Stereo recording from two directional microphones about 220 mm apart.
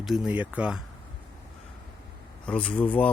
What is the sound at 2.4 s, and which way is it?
Speech, 5° left (ahead or behind).